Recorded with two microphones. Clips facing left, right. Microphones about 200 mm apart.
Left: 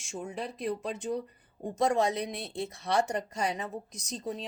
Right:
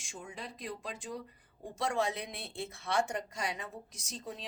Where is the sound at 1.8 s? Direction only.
40° left (ahead or behind).